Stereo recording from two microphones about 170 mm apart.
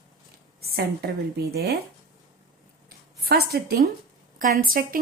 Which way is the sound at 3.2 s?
65° right (ahead or behind).